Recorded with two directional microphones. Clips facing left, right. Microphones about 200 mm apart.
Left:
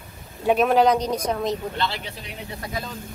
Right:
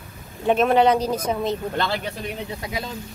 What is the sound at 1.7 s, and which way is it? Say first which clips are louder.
Speech: right 3 dB; 50° right (ahead or behind).